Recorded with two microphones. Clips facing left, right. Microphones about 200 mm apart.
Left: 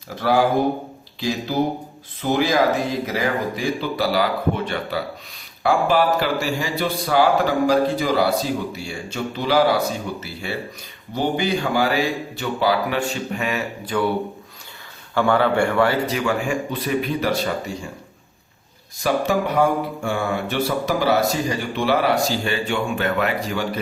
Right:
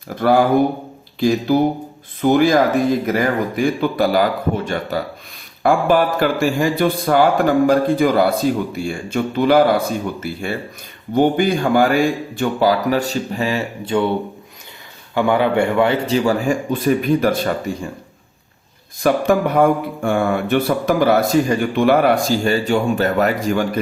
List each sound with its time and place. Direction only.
0.2 s speech: 50° right (ahead or behind)
2.2 s speech: 50° right (ahead or behind); by 14.1 s 25° right (ahead or behind)
15.1 s a man's voice: 15° right (ahead or behind); by 17.5 s 50° right (ahead or behind)
19.0 s speech: 55° right (ahead or behind)